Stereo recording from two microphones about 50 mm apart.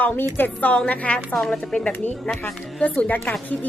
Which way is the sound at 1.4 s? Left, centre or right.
Centre.